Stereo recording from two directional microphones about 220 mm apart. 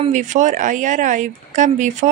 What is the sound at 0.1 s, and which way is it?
A woman's voice, 35° right (ahead or behind).